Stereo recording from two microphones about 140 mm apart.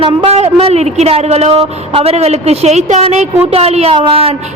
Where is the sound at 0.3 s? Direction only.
45° right (ahead or behind).